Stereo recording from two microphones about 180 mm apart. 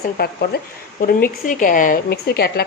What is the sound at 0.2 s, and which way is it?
A woman's voice, 55° left (ahead or behind).